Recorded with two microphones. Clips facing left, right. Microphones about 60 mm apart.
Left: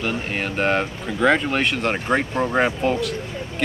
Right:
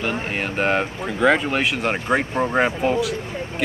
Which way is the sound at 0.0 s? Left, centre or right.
Centre.